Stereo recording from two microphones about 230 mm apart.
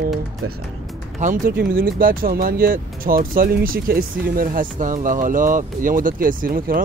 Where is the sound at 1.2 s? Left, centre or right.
Right.